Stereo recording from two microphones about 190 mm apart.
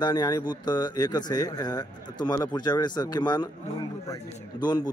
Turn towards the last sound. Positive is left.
turn(degrees=20)  # may be behind; listen again after turning